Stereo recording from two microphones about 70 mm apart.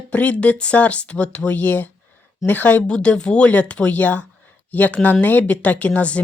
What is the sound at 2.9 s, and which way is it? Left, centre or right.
Speech, centre.